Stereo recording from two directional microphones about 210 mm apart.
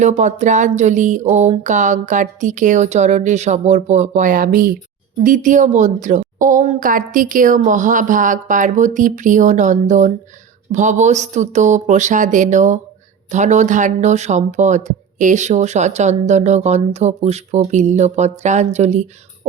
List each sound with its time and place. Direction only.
0.0 s speech: 35° right (ahead or behind)